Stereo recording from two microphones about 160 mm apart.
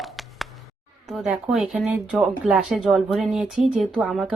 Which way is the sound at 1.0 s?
5° right (ahead or behind).